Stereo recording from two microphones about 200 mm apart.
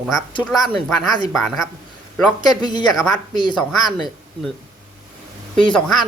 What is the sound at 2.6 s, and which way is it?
Speech, 20° left (ahead or behind).